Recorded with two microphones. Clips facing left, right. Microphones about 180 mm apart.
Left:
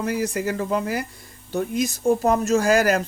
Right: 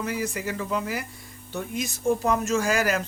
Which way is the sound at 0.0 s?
40° left (ahead or behind).